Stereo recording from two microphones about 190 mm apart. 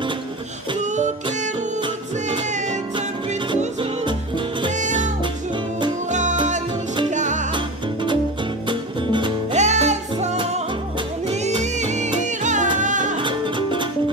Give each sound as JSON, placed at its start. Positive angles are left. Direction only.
{"t": 0.7, "sound": "music", "side_deg": -40}
{"t": 4.7, "sound": "music", "side_deg": -40}
{"t": 7.1, "sound": "music", "side_deg": -40}
{"t": 7.5, "sound": "music", "side_deg": -25}
{"t": 9.5, "sound": "music", "side_deg": -35}
{"t": 10.3, "sound": "music", "side_deg": -25}
{"t": 13.2, "sound": "music", "side_deg": -25}